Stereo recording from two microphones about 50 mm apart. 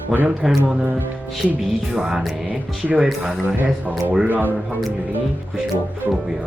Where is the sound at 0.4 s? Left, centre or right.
Centre.